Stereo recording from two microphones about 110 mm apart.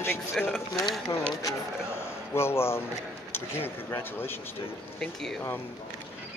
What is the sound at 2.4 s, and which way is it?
Speech, 25° left (ahead or behind).